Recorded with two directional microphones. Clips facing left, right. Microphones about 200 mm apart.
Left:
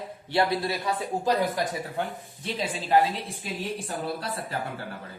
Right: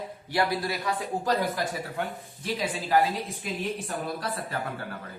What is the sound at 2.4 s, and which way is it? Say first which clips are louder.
A man's voice: right 1 dB; 25° left (ahead or behind).